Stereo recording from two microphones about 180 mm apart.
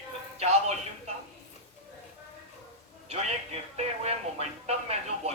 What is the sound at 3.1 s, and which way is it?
Speech, 35° right (ahead or behind).